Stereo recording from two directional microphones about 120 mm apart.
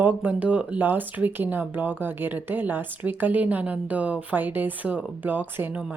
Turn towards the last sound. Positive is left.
turn(degrees=-10)  # may be behind; listen again after turning